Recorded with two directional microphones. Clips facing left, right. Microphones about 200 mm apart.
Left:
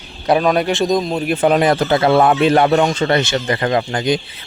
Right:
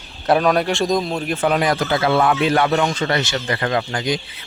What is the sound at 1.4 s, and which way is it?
Speech, 25° left (ahead or behind).